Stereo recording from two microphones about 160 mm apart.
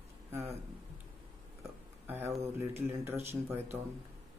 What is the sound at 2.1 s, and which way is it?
A man's voice, 15° right (ahead or behind).